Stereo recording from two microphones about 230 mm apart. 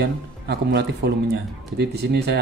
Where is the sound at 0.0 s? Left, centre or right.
Right.